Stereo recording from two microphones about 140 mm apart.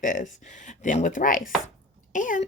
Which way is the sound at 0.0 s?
65° left (ahead or behind).